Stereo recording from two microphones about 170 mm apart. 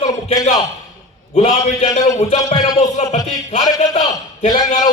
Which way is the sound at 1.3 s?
40° left (ahead or behind).